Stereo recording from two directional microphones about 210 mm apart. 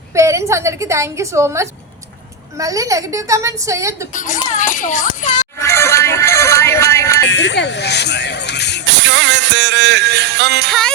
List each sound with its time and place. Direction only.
0.1 s a woman's voice: 15° right (ahead or behind)
4.1 s a child's voice: 35° left (ahead or behind)
5.6 s music: 15° left (ahead or behind)
7.3 s speech: 60° left (ahead or behind)
8.9 s music: 60° right (ahead or behind)
10.7 s music: 5° left (ahead or behind)